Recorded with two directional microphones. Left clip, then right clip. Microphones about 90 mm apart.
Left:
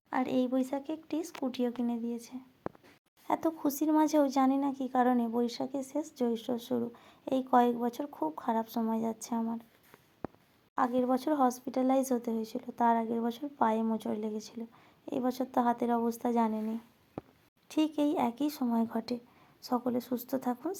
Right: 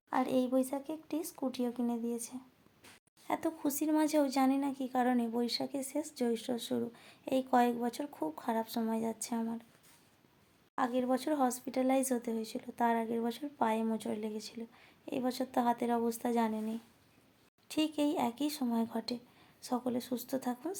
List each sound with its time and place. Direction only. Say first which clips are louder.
0.1 s speech: left 1 dB; 30° left (ahead or behind); by 1.9 s 45° left (ahead or behind)
2.0 s a woman's voice: even; 20° left (ahead or behind)
3.2 s a woman's voice: left 4 dB; 40° left (ahead or behind); by 9.1 s 20° left (ahead or behind)
10.8 s a woman's voice: left 3 dB; 35° left (ahead or behind)
17.7 s speech: left 3 dB; 35° left (ahead or behind)